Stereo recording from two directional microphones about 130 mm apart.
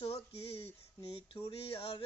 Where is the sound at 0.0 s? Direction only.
45° left (ahead or behind).